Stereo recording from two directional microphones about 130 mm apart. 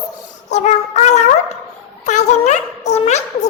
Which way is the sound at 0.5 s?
60° left (ahead or behind).